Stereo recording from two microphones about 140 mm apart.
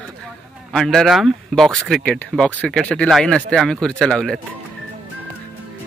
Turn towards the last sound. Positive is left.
turn(degrees=5)  # may be behind; listen again after turning